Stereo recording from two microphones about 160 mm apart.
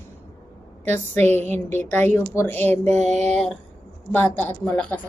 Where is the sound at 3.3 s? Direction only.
5° left (ahead or behind).